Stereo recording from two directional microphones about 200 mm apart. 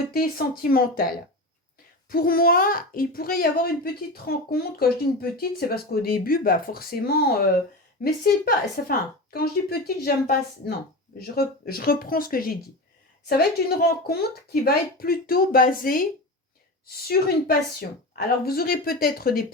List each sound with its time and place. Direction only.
0.1 s speech: 50° left (ahead or behind)
2.0 s speech: 45° left (ahead or behind)